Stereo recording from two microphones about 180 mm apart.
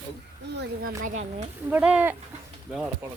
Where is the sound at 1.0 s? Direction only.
40° right (ahead or behind).